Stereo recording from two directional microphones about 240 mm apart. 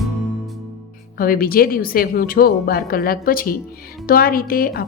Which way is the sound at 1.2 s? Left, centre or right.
Left.